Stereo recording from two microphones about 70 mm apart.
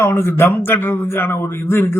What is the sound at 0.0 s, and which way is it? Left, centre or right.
A man's voice, left.